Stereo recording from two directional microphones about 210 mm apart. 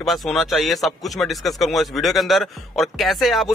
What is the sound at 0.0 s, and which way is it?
Speech, centre (ahead or behind).